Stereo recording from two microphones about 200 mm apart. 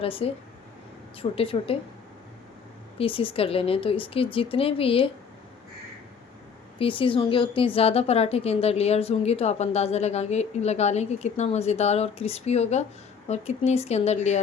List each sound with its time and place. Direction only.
0.0 s speech: 30° left (ahead or behind)
3.0 s speech: 25° left (ahead or behind)
6.7 s a woman's voice: 25° left (ahead or behind)